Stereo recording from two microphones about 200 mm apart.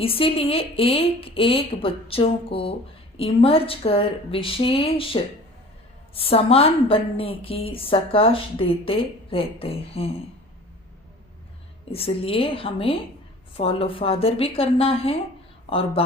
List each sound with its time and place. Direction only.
0.0 s a woman's voice: 30° left (ahead or behind)
11.9 s a woman's voice: 30° left (ahead or behind)